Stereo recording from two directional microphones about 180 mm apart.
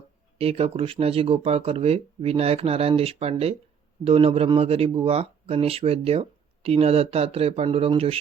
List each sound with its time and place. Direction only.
0.3 s speech: 35° right (ahead or behind)